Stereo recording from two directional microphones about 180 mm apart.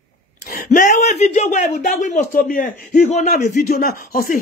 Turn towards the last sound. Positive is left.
turn(degrees=50)  # may be behind; listen again after turning